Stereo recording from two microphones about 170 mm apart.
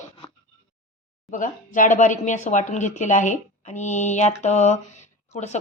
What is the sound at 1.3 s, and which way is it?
Speech, 50° left (ahead or behind).